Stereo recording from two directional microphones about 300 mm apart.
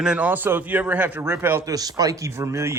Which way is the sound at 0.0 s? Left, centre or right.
Centre.